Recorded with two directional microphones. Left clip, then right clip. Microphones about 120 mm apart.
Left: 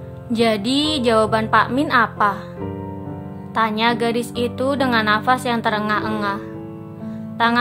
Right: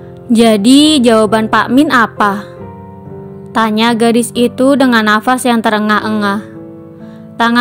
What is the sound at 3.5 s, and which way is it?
A woman's voice, 70° right (ahead or behind).